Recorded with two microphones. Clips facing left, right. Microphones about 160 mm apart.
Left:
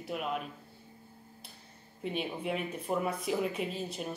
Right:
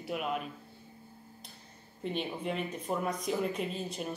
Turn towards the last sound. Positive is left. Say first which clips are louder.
# even
turn(degrees=0)  # may be behind; listen again after turning